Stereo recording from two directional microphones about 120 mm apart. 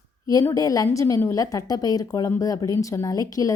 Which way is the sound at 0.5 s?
30° left (ahead or behind).